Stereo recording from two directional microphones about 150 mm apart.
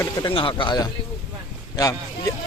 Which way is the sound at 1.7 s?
25° left (ahead or behind).